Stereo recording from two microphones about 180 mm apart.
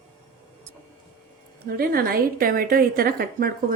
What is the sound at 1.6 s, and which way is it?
A woman's voice, 55° right (ahead or behind).